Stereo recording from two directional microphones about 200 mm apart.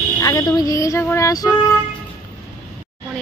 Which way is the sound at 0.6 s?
15° left (ahead or behind).